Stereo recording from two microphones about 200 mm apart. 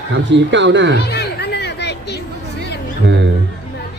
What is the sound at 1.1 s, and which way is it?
Music, 55° left (ahead or behind).